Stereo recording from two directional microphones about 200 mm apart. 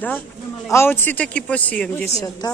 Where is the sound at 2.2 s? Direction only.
20° left (ahead or behind).